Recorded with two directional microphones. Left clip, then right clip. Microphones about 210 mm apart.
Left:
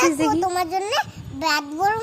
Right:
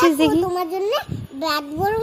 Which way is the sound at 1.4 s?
65° left (ahead or behind).